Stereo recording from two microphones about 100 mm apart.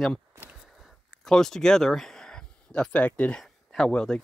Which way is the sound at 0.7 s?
Centre (ahead or behind).